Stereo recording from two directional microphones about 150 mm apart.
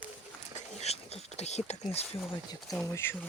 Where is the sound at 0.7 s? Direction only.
45° left (ahead or behind).